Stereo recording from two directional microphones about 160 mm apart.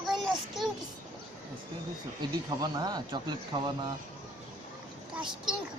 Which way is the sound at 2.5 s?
25° right (ahead or behind).